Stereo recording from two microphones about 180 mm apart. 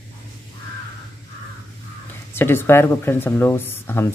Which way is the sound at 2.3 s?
10° left (ahead or behind).